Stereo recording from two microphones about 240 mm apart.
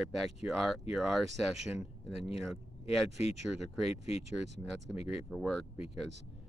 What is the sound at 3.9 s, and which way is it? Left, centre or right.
Speech, left.